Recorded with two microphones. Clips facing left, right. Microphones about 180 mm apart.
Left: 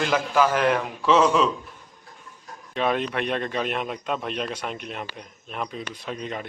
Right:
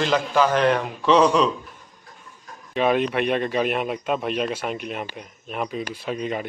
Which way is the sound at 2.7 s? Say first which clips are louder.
Right 4 dB; 5° right (ahead or behind).